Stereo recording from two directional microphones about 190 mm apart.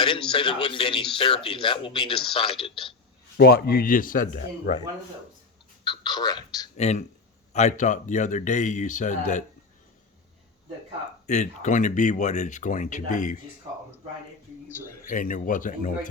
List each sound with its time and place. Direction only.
0.0 s speech: 25° left (ahead or behind)
3.3 s speech: 55° left (ahead or behind)
5.8 s speech: 25° left (ahead or behind)
6.7 s speech: 35° left (ahead or behind)
11.3 s speech: 40° left (ahead or behind)
15.1 s speech: 45° left (ahead or behind)